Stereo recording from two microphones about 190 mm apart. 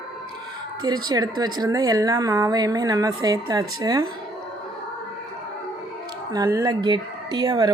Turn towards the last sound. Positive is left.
turn(degrees=-20)  # may be behind; listen again after turning